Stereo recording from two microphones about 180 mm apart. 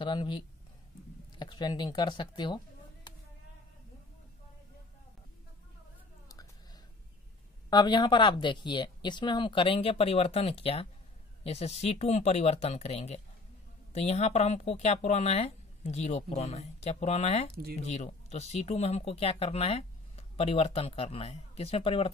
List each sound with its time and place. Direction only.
0.0 s speech: 25° left (ahead or behind)
1.4 s speech: 25° left (ahead or behind)
6.2 s a sound: 20° left (ahead or behind)
7.7 s speech: 25° left (ahead or behind)